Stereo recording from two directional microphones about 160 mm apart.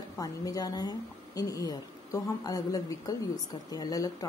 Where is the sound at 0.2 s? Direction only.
20° left (ahead or behind).